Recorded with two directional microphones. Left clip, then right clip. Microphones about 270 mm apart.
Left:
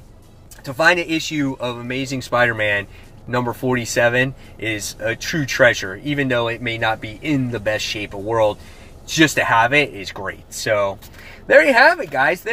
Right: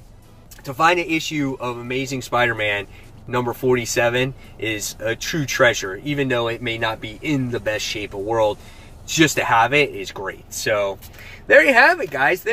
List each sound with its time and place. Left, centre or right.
0.7 s speech: centre